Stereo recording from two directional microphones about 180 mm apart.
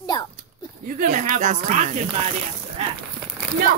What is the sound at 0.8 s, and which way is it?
Speech, 45° right (ahead or behind).